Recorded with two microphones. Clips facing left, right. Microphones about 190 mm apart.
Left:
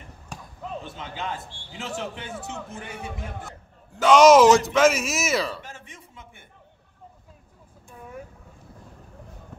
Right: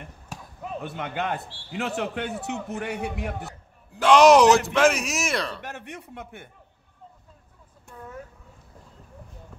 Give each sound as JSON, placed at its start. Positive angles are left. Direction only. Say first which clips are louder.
{"t": 0.3, "sound": "basketball bounce", "louder": "even", "side_deg": -10}
{"t": 0.8, "sound": "a man's voice", "louder": "right 4 dB", "side_deg": -60}
{"t": 3.9, "sound": "speech", "louder": "left 1 dB", "side_deg": 0}
{"t": 5.6, "sound": "a man's voice", "louder": "right 6 dB", "side_deg": -65}